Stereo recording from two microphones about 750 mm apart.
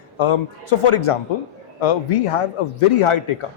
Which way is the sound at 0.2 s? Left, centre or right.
Left.